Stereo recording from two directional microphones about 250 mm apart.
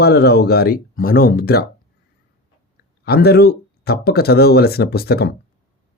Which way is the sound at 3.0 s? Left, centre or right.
Left.